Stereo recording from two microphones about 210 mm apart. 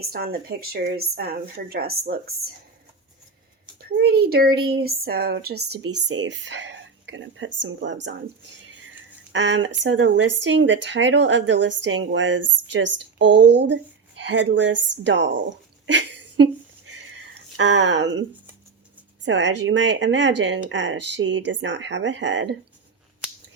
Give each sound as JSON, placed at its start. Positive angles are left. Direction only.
{"t": 0.1, "sound": "speech", "side_deg": -45}
{"t": 3.8, "sound": "speech", "side_deg": -50}
{"t": 5.7, "sound": "speech", "side_deg": -90}
{"t": 6.1, "sound": "speech", "side_deg": -60}
{"t": 9.3, "sound": "speech", "side_deg": -60}
{"t": 17.6, "sound": "speech", "side_deg": -60}